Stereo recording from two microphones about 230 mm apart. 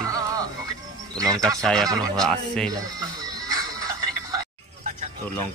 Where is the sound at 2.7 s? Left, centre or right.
Centre.